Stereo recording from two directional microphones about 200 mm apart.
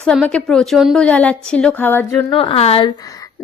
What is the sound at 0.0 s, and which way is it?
A woman's voice, 5° left (ahead or behind).